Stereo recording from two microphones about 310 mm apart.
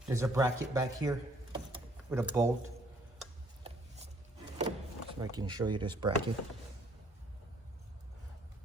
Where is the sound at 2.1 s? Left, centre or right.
Centre.